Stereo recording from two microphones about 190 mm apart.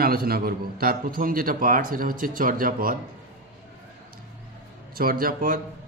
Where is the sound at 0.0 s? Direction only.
50° right (ahead or behind).